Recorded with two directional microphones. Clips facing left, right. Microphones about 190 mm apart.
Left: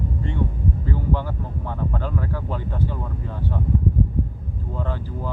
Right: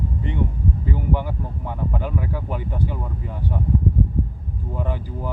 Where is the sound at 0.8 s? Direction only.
15° right (ahead or behind).